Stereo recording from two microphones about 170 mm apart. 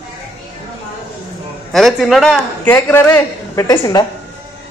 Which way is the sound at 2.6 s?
15° left (ahead or behind).